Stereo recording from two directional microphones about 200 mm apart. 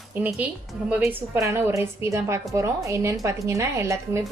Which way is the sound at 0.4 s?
5° right (ahead or behind).